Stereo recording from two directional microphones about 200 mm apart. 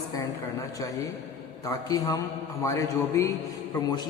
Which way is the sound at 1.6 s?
15° left (ahead or behind).